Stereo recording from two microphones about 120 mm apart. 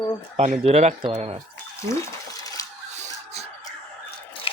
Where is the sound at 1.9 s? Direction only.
25° left (ahead or behind).